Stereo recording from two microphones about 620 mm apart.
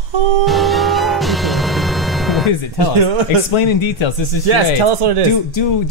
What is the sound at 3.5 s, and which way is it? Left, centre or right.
Speech, left.